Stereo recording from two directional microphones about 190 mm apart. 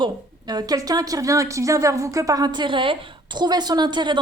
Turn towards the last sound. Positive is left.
turn(degrees=-25)  # may be behind; listen again after turning